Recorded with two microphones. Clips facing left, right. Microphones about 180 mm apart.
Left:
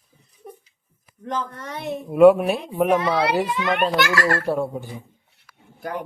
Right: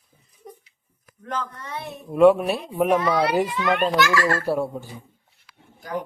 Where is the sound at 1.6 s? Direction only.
90° left.